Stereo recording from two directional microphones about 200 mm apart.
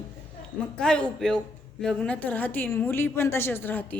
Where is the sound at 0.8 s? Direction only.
5° left (ahead or behind).